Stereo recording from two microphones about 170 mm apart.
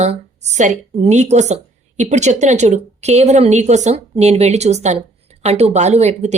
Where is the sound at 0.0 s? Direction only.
40° right (ahead or behind).